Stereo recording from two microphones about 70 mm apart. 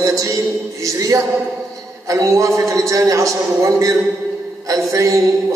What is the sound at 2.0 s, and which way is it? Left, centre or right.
A man's voice, right.